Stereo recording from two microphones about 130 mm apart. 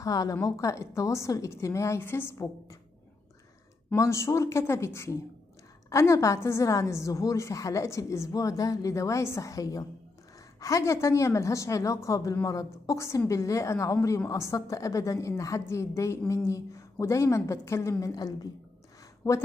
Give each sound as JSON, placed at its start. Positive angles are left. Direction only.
{"t": 0.0, "sound": "a woman's voice", "side_deg": 25}
{"t": 3.9, "sound": "a woman's voice", "side_deg": 20}